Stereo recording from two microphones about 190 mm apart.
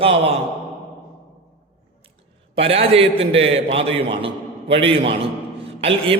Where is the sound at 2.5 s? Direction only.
30° right (ahead or behind).